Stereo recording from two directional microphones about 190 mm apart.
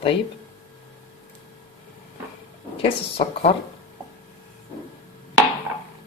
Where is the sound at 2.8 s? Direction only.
30° left (ahead or behind).